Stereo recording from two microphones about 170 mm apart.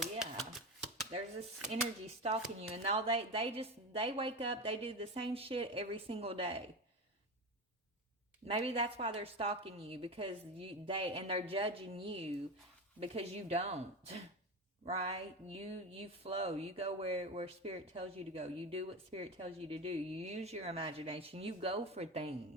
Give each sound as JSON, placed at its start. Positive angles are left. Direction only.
{"t": 1.1, "sound": "speech", "side_deg": -35}
{"t": 8.4, "sound": "speech", "side_deg": -35}